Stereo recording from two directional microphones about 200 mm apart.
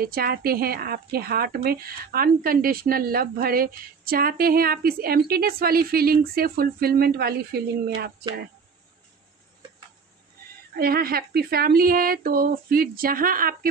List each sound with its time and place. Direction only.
0.0 s speech: 50° right (ahead or behind)
10.8 s speech: 50° right (ahead or behind)